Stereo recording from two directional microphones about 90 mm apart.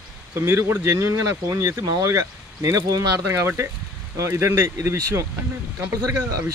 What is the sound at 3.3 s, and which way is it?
Speech, 35° right (ahead or behind).